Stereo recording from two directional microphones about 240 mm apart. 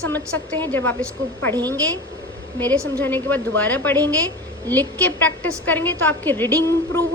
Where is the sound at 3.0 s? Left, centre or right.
Centre.